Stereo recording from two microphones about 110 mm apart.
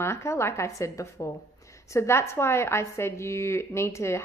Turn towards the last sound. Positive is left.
turn(degrees=25)  # may be behind; listen again after turning